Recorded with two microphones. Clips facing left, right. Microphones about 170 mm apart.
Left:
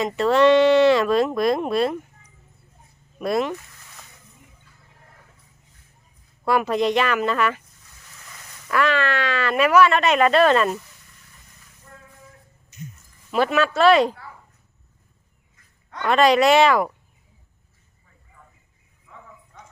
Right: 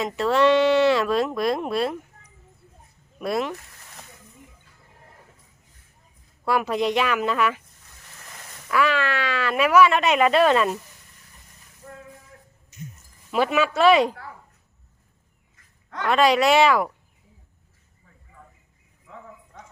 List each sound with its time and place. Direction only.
0.0 s speech: 5° right (ahead or behind)
3.2 s speech: 5° right (ahead or behind)
6.4 s speech: 5° right (ahead or behind)
8.7 s speech: 5° right (ahead or behind)
13.3 s speech: 10° right (ahead or behind)
16.0 s speech: 5° right (ahead or behind)